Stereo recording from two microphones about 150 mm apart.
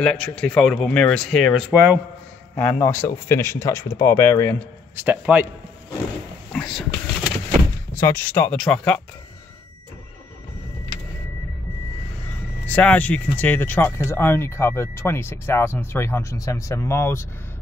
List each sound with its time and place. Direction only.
0.0 s speech: 5° left (ahead or behind); by 2.0 s 10° right (ahead or behind)
2.5 s speech: 10° left (ahead or behind)
4.9 s a man's voice: 10° right (ahead or behind)
6.5 s vehicle: 5° left (ahead or behind)
7.9 s speech: 10° left (ahead or behind)
12.6 s speech: 10° left (ahead or behind)